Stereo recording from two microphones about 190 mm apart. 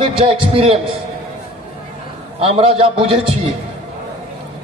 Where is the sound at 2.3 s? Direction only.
30° right (ahead or behind).